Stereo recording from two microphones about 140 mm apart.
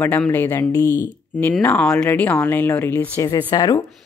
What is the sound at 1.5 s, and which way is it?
Speech, 5° left (ahead or behind).